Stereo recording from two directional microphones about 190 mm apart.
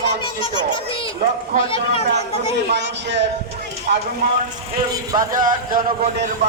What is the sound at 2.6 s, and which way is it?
A man's voice, 65° right (ahead or behind).